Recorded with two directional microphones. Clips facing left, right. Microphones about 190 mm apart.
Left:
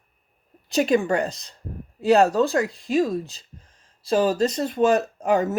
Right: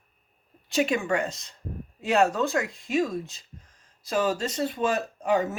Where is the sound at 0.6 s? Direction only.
40° left (ahead or behind).